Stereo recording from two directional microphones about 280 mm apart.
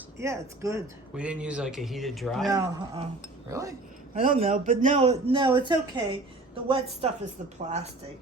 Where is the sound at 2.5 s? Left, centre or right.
Centre.